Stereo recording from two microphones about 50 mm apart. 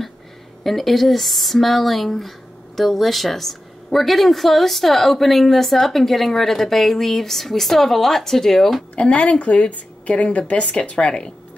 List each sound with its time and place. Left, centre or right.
0.7 s speech: centre
8.9 s a woman's voice: left